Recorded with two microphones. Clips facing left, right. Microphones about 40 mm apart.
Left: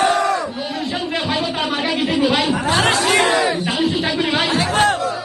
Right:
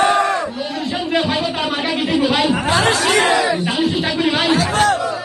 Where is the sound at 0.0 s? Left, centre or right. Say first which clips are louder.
Right 1 dB; right.